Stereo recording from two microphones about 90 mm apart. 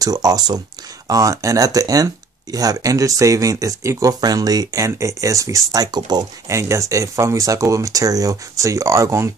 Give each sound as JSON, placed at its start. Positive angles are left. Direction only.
{"t": 0.0, "sound": "speech", "side_deg": -45}
{"t": 6.5, "sound": "speech", "side_deg": -35}